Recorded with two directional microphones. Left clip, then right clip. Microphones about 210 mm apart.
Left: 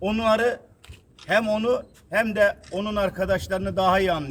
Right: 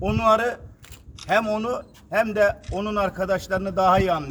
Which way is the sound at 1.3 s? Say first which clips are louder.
Left 1 dB; 10° left (ahead or behind).